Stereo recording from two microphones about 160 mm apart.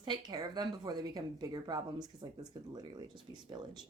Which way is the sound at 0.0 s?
25° right (ahead or behind).